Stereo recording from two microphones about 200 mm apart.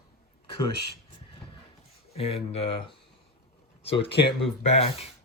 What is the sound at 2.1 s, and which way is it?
Speech, 30° left (ahead or behind).